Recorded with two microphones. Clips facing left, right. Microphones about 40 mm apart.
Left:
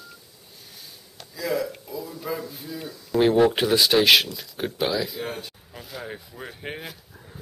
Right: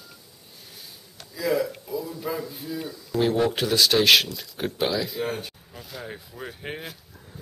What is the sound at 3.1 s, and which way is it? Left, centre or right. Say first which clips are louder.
Speech: left 4 dB; centre.